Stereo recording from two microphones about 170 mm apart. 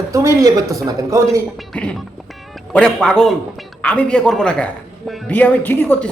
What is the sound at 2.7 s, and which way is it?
Speech, 5° left (ahead or behind).